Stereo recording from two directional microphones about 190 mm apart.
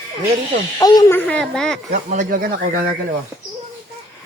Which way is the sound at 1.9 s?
40° right (ahead or behind).